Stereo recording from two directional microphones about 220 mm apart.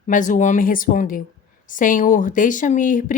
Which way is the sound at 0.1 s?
35° left (ahead or behind).